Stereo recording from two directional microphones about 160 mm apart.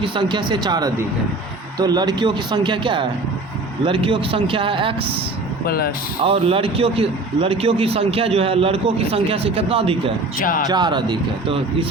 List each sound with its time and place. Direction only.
0.0 s a man's voice: 30° right (ahead or behind)
5.6 s speech: 70° left (ahead or behind)
6.2 s a man's voice: 35° right (ahead or behind)